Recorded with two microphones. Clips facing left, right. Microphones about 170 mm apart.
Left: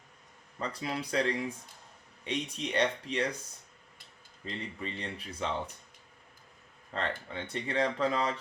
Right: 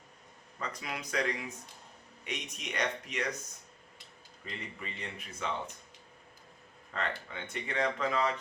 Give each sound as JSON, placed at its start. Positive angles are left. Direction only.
{"t": 0.6, "sound": "speech", "side_deg": 30}
{"t": 4.4, "sound": "speech", "side_deg": 30}
{"t": 6.9, "sound": "speech", "side_deg": 30}